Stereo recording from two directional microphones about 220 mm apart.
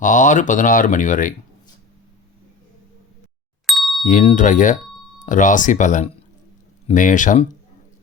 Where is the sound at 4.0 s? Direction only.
35° left (ahead or behind).